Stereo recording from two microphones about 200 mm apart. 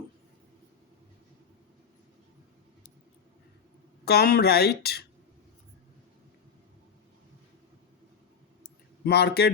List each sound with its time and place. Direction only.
4.0 s speech: 50° left (ahead or behind)
9.0 s speech: 55° left (ahead or behind)